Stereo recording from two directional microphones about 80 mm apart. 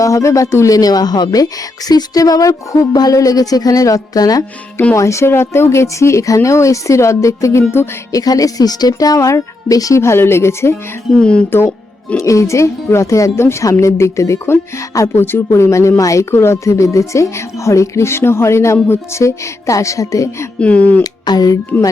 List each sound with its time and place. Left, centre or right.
0.0 s speech: left
4.9 s a woman's voice: left
10.0 s a woman's voice: left
11.2 s speech: centre
12.1 s a woman's voice: left
20.6 s speech: centre
21.0 s speech: left